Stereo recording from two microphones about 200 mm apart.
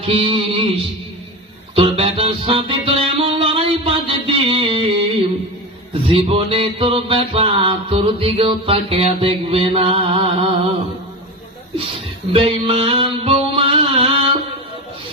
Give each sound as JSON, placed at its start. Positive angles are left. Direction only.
{"t": 0.0, "sound": "music", "side_deg": -30}
{"t": 1.7, "sound": "music", "side_deg": -30}
{"t": 5.9, "sound": "music", "side_deg": -25}
{"t": 12.3, "sound": "music", "side_deg": -25}